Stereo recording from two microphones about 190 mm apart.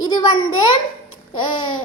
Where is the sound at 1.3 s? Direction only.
25° left (ahead or behind).